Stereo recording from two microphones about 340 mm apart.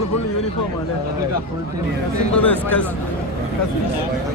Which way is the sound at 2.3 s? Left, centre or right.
Centre.